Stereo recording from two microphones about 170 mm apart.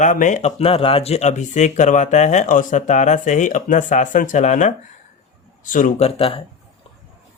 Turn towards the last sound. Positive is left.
turn(degrees=35)  # may be behind; listen again after turning